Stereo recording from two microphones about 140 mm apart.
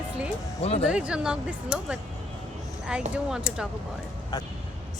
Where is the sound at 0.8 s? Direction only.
5° right (ahead or behind).